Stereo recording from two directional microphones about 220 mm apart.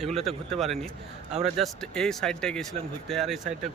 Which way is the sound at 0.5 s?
Centre (ahead or behind).